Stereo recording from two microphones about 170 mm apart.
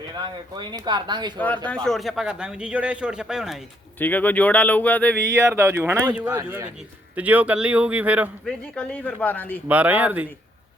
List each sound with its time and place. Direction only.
0.5 s speech: 25° right (ahead or behind)
1.4 s speech: 10° left (ahead or behind)
3.9 s speech: 10° left (ahead or behind)
5.2 s speech: 15° right (ahead or behind)
8.4 s speech: 5° left (ahead or behind)
9.6 s speech: 10° right (ahead or behind)